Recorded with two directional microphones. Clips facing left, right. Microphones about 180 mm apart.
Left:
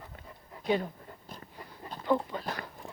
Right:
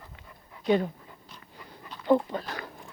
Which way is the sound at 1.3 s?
40° left (ahead or behind).